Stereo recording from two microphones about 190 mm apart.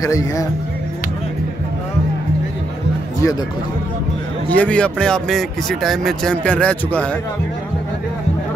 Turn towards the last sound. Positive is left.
turn(degrees=5)  # may be behind; listen again after turning